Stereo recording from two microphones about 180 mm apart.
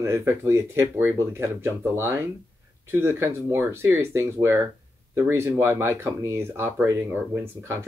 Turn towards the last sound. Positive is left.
turn(degrees=-15)  # may be behind; listen again after turning